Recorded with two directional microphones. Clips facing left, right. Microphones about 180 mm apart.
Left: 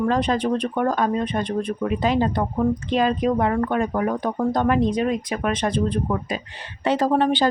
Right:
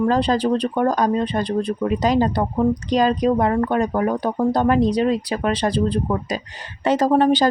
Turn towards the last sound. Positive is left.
turn(degrees=-40)  # may be behind; listen again after turning